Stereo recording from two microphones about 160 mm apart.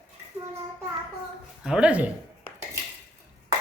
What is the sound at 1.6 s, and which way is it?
Speech, 5° right (ahead or behind).